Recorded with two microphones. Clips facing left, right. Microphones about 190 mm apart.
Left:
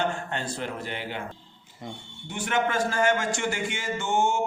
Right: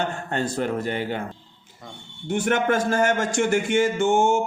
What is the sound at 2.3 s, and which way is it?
Speech, 50° right (ahead or behind).